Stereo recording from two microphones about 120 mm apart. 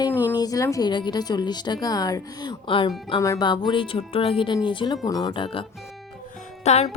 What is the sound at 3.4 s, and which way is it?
Speech, 40° left (ahead or behind).